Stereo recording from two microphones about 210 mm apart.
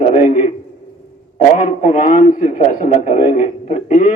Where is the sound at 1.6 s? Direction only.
35° left (ahead or behind).